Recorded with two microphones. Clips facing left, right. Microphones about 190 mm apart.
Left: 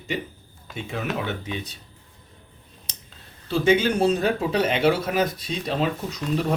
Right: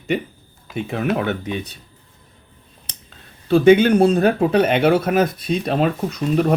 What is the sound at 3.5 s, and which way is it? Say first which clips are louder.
Speech: right 8 dB; 60° right (ahead or behind).